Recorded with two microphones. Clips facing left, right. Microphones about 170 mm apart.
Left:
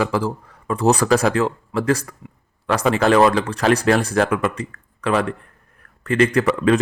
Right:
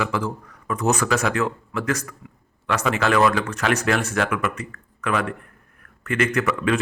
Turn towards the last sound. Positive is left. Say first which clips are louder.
# left 5 dB
turn(degrees=35)  # may be behind; listen again after turning